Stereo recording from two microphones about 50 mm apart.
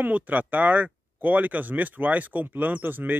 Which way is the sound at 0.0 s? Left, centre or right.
Right.